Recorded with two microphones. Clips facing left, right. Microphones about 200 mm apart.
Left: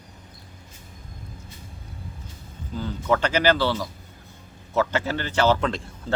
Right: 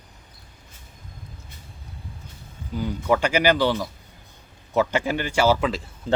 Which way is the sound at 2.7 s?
10° right (ahead or behind).